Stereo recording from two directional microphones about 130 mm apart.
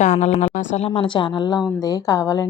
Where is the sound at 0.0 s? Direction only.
65° left (ahead or behind).